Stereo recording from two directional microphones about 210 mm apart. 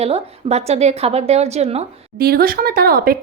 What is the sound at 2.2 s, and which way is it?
Speech, 45° right (ahead or behind).